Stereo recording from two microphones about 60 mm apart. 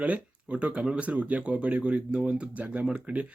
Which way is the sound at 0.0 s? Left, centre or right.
Right.